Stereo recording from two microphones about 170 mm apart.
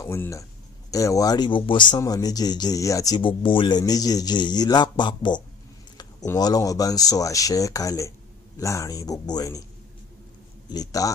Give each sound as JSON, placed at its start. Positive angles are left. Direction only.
{"t": 0.0, "sound": "speech", "side_deg": 15}
{"t": 10.7, "sound": "speech", "side_deg": 20}